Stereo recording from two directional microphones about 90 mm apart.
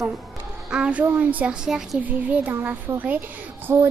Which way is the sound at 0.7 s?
15° right (ahead or behind).